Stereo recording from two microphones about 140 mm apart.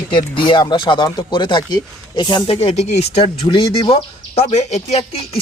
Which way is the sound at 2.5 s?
50° left (ahead or behind).